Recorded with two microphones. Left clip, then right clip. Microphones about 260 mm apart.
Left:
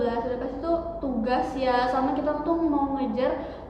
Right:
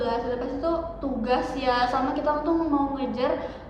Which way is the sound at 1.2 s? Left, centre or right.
Centre.